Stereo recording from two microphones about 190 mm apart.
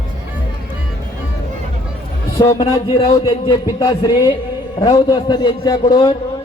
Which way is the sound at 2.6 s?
25° left (ahead or behind).